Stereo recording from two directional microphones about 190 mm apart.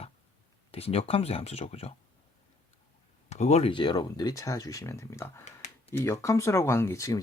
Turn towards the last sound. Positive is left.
turn(degrees=15)  # may be behind; listen again after turning